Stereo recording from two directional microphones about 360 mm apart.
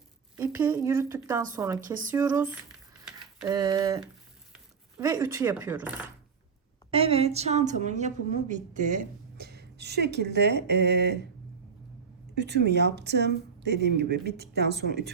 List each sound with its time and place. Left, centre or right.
0.3 s a woman's voice: centre
6.9 s a woman's voice: centre
12.4 s a woman's voice: right